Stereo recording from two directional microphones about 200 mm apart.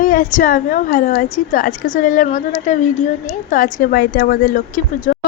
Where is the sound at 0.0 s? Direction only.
40° left (ahead or behind).